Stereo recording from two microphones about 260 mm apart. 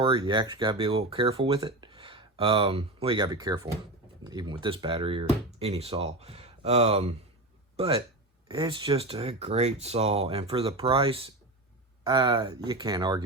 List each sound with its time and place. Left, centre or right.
0.0 s speech: centre